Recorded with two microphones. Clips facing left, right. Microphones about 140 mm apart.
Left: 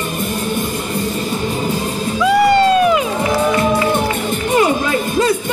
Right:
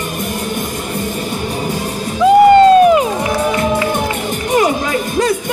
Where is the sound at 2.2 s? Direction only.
45° right (ahead or behind).